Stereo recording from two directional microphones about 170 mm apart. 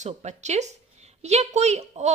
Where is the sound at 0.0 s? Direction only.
40° right (ahead or behind).